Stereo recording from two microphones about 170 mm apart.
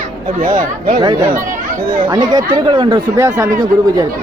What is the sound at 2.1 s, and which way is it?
Speech, 25° right (ahead or behind).